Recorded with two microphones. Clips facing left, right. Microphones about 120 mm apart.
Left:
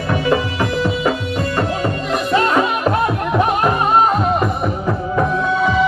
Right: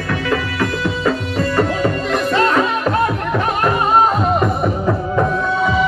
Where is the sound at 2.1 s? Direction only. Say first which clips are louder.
Left 1 dB; 15° left (ahead or behind).